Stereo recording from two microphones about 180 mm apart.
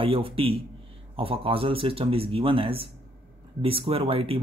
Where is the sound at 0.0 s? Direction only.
30° right (ahead or behind).